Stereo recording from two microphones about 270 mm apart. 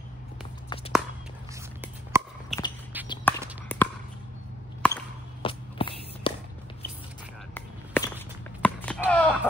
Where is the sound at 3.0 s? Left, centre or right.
Centre.